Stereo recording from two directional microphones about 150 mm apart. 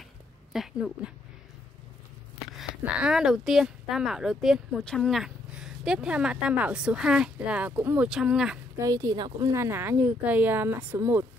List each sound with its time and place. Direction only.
0.5 s speech: centre (ahead or behind)
2.8 s speech: 5° right (ahead or behind)
8.7 s speech: 25° right (ahead or behind)